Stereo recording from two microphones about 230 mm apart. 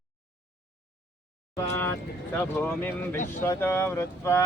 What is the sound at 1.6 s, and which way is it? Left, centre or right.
Vehicle, centre.